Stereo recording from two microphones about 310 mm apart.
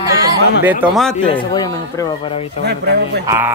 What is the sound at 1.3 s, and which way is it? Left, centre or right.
Speech, centre.